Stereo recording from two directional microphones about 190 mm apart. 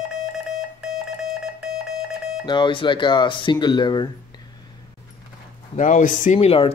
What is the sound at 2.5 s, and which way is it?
Speech, 25° left (ahead or behind).